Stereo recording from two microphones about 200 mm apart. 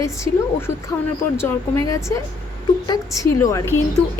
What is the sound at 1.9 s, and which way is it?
A woman's voice, 15° left (ahead or behind).